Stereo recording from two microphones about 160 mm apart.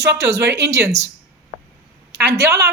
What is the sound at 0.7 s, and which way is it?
Speech, 15° right (ahead or behind).